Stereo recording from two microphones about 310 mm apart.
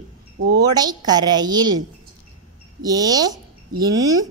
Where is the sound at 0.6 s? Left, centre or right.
Centre.